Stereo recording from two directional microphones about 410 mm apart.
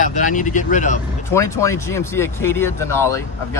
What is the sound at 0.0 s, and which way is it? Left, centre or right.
Speech, centre.